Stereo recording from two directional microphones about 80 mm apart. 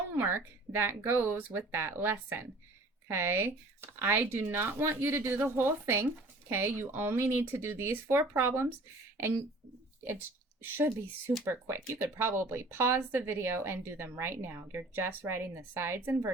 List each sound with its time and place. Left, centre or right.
0.2 s speech: right
10.6 s speech: right